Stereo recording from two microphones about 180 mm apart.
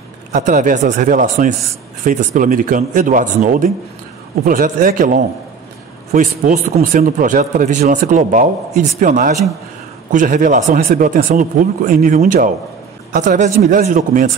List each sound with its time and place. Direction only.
0.3 s speech: 45° right (ahead or behind)